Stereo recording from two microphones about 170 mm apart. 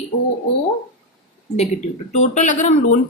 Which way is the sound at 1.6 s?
40° left (ahead or behind).